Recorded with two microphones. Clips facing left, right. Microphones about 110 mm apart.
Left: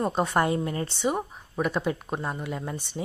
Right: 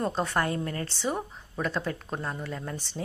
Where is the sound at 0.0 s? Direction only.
15° left (ahead or behind).